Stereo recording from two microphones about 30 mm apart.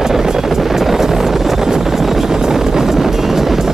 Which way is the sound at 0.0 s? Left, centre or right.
Centre.